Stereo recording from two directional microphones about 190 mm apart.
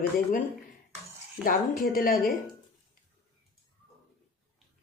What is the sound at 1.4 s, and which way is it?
Speech, 50° left (ahead or behind).